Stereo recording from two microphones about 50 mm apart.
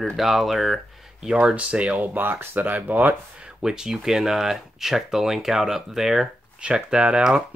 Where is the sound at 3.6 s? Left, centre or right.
Centre.